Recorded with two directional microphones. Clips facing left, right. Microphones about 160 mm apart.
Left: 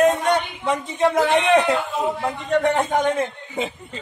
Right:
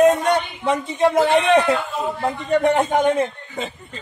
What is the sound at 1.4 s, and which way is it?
Speech, 20° left (ahead or behind).